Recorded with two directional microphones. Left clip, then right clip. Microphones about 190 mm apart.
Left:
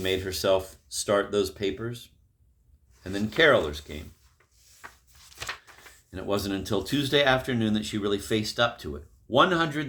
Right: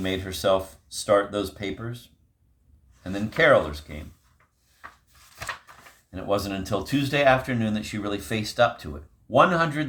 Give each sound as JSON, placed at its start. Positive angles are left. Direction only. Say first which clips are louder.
{"t": 0.0, "sound": "speech", "louder": "right 1 dB", "side_deg": 25}
{"t": 3.0, "sound": "speech", "louder": "right 1 dB", "side_deg": 25}
{"t": 6.1, "sound": "speech", "louder": "right 3 dB", "side_deg": 25}